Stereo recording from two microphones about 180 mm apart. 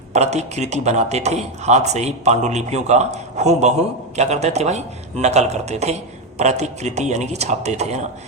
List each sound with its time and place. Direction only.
0.1 s speech: 40° right (ahead or behind)